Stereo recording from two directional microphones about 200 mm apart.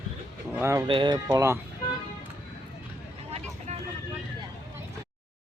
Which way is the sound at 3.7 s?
35° right (ahead or behind).